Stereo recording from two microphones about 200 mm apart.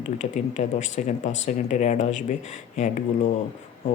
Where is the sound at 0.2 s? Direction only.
35° left (ahead or behind).